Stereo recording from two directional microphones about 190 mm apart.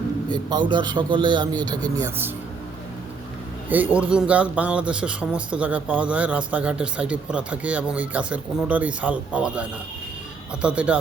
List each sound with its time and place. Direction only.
0.3 s a man's voice: 25° right (ahead or behind)
3.7 s speech: 10° right (ahead or behind)